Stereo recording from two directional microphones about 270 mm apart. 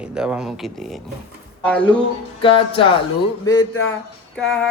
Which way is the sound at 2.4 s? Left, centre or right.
Centre.